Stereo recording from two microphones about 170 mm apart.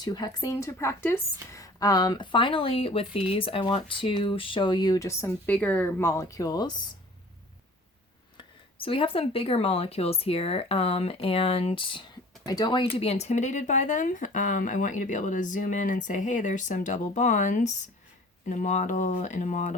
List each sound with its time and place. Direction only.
0.0 s speech: 25° left (ahead or behind)
8.4 s speech: 30° left (ahead or behind)